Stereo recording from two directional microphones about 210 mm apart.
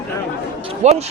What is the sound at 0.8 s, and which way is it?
Speech, 30° right (ahead or behind).